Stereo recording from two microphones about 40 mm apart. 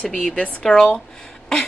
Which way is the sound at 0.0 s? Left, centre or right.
Left.